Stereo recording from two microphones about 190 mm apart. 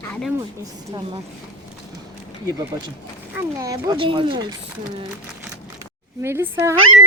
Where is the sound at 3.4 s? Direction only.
15° right (ahead or behind).